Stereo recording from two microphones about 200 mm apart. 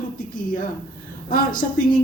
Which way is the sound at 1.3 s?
45° left (ahead or behind).